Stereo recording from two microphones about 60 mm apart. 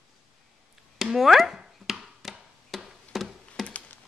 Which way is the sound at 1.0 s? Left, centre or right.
Centre.